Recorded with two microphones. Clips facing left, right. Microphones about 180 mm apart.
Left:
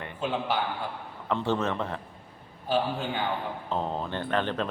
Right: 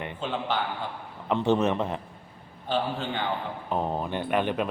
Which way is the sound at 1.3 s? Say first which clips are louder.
Right 4 dB; 20° right (ahead or behind).